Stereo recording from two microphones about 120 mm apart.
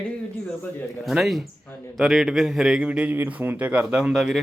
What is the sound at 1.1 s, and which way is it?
Speech, centre (ahead or behind).